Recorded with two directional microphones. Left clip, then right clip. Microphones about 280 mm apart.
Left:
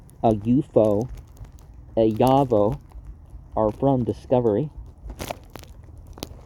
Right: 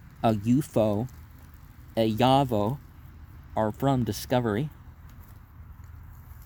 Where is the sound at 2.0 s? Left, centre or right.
Centre.